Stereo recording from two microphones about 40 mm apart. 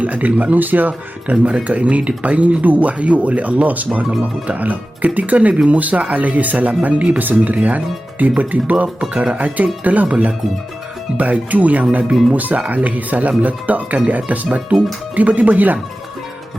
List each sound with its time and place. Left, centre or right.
0.0 s speech: right
1.5 s speech: right